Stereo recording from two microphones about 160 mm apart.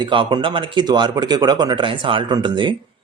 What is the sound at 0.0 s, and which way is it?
Speech, 30° right (ahead or behind).